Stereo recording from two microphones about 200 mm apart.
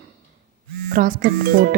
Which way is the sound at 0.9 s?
45° right (ahead or behind).